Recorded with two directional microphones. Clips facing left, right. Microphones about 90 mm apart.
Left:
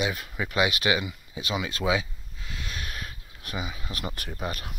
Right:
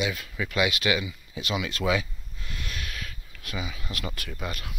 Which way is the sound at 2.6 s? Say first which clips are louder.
Left 1 dB; 30° left (ahead or behind).